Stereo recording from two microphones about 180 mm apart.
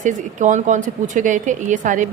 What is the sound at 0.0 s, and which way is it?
A woman's voice, 45° right (ahead or behind).